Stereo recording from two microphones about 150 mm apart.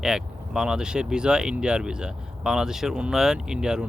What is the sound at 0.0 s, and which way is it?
Speech, 5° right (ahead or behind).